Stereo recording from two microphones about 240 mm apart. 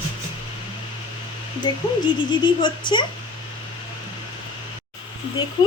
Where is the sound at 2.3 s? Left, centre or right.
Centre.